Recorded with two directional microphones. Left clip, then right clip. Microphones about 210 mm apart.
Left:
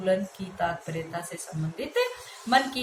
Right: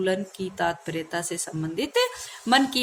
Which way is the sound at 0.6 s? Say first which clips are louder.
Right 2 dB; 60° right (ahead or behind).